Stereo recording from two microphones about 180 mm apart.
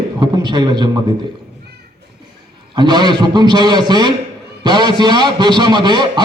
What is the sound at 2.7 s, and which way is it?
A man's voice, 25° right (ahead or behind).